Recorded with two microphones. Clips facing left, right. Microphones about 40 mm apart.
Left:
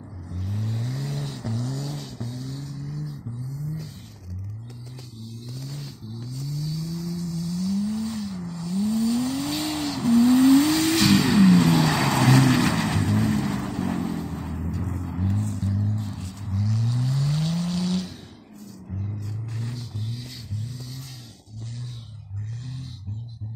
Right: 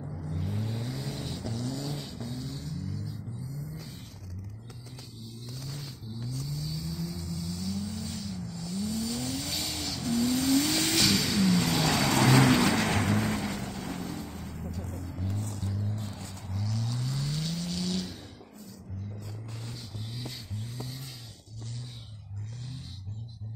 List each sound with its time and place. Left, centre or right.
0.2 s vehicle: centre
6.1 s vehicle: centre
11.2 s vehicle: centre
11.5 s vehicle: centre
13.8 s vehicle: centre
14.8 s vehicle: left
15.6 s music: centre
15.9 s vehicle: centre
19.6 s vehicle: centre
20.5 s vehicle: right